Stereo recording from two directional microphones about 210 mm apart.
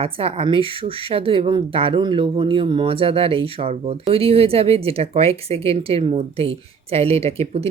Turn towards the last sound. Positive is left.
turn(degrees=-30)  # may be behind; listen again after turning